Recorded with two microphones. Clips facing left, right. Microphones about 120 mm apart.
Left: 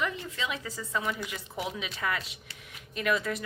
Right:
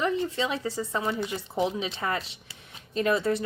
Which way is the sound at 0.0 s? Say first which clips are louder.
Right 6 dB; 30° right (ahead or behind).